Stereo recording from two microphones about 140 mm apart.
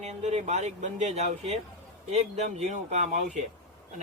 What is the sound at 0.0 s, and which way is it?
Speech, 50° right (ahead or behind).